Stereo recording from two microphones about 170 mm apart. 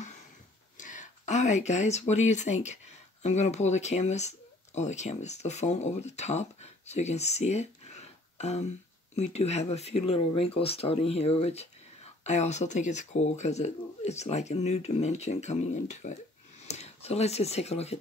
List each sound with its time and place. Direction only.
0.7 s speech: 45° left (ahead or behind)